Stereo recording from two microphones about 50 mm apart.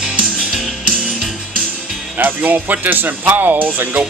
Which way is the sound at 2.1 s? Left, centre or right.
Right.